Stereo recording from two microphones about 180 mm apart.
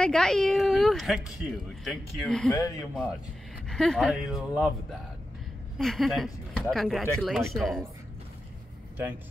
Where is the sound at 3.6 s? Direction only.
5° left (ahead or behind).